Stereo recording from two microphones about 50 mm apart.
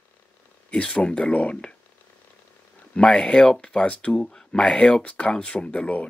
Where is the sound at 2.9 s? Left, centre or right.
Centre.